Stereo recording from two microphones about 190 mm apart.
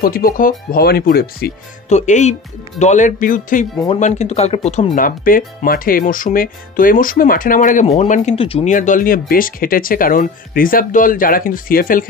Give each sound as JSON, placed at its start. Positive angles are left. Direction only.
{"t": 0.0, "sound": "speech", "side_deg": 50}
{"t": 1.9, "sound": "speech", "side_deg": 40}
{"t": 4.9, "sound": "speech", "side_deg": 45}
{"t": 8.7, "sound": "speech", "side_deg": 45}